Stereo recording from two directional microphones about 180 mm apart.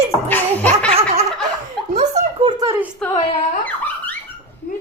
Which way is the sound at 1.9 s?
40° right (ahead or behind).